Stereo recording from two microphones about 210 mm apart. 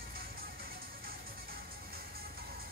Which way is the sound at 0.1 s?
45° right (ahead or behind).